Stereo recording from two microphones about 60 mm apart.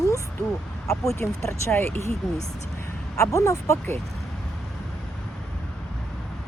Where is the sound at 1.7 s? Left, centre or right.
Left.